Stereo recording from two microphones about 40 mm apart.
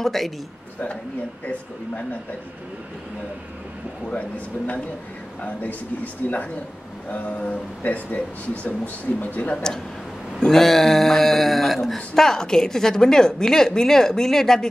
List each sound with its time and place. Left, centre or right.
0.0 s a man's voice: centre
4.1 s speech: left
10.4 s speech: centre